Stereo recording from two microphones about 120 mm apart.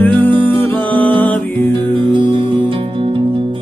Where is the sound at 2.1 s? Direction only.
45° right (ahead or behind).